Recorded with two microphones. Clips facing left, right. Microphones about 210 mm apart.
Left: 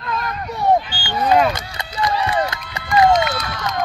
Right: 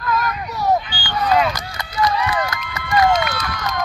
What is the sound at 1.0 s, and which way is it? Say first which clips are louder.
Chop: left 2 dB; 25° left (ahead or behind).